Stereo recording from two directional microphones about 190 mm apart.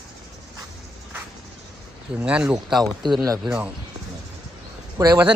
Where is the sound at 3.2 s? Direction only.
20° right (ahead or behind).